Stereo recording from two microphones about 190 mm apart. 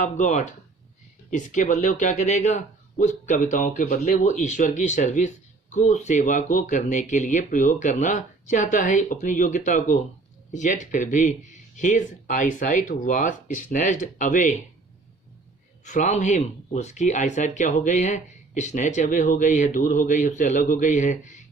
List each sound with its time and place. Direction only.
0.0 s speech: 40° left (ahead or behind)
15.8 s speech: 40° left (ahead or behind)